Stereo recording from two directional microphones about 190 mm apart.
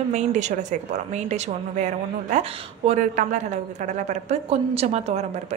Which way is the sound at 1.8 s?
35° right (ahead or behind).